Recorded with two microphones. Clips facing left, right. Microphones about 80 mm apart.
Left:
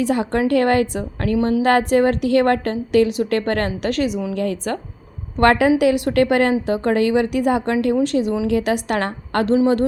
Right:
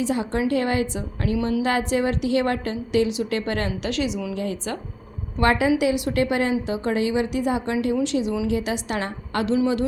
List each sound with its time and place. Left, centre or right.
0.0 s a woman's voice: left